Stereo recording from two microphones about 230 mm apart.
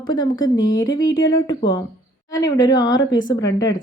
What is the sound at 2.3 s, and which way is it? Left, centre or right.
Speech, centre.